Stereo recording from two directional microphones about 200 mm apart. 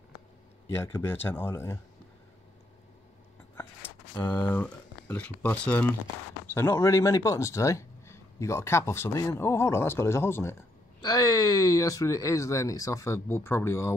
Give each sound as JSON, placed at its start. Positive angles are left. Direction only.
{"t": 0.9, "sound": "speech", "side_deg": 10}
{"t": 4.1, "sound": "speech", "side_deg": 20}
{"t": 4.5, "sound": "speech", "side_deg": 5}